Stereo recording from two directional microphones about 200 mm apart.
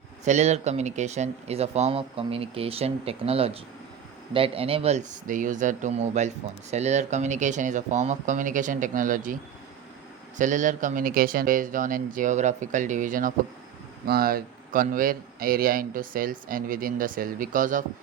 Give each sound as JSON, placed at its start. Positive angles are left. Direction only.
{"t": 0.3, "sound": "speech", "side_deg": -35}